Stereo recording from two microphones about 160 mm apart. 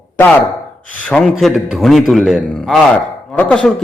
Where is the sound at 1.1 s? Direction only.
5° left (ahead or behind).